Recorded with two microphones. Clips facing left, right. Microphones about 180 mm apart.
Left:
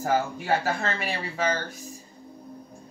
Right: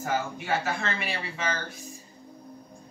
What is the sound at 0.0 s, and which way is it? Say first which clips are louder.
Speech: left 4 dB; 40° left (ahead or behind).